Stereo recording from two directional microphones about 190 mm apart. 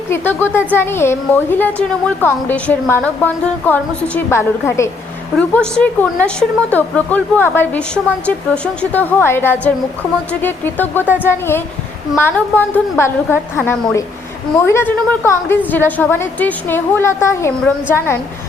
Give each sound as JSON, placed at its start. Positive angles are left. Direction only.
{"t": 0.1, "sound": "a woman's voice", "side_deg": 10}
{"t": 11.0, "sound": "speech", "side_deg": -10}
{"t": 11.3, "sound": "a woman's voice", "side_deg": 10}